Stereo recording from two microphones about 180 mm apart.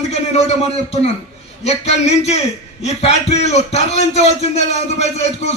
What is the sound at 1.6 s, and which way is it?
A man's voice, 35° left (ahead or behind).